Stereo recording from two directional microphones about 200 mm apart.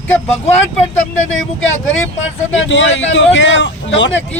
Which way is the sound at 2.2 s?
70° left (ahead or behind).